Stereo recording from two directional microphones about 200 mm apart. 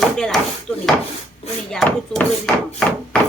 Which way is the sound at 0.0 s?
Centre (ahead or behind).